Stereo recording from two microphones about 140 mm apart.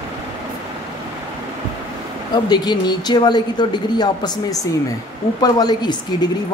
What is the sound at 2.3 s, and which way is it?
Speech, 30° left (ahead or behind).